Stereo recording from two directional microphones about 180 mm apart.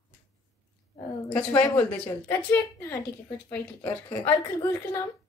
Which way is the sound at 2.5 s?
15° left (ahead or behind).